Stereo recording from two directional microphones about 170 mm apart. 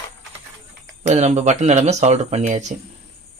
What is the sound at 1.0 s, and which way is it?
Speech, 40° right (ahead or behind).